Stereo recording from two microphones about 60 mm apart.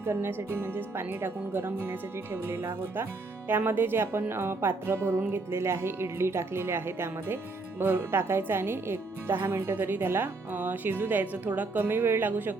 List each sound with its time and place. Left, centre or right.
0.0 s speech: right